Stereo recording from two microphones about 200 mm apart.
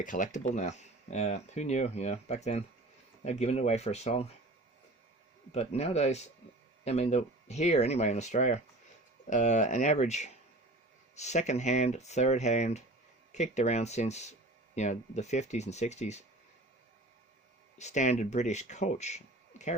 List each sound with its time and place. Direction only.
0.0 s speech: 40° left (ahead or behind)
5.5 s speech: 35° left (ahead or behind)
17.7 s speech: 35° left (ahead or behind)